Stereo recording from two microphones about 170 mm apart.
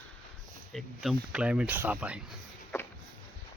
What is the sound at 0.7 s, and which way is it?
Speech, centre (ahead or behind).